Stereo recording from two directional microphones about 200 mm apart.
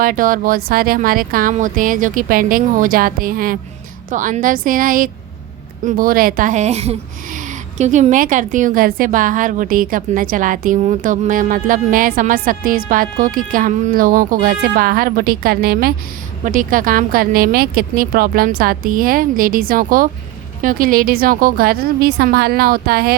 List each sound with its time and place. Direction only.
0.0 s speech: 45° right (ahead or behind)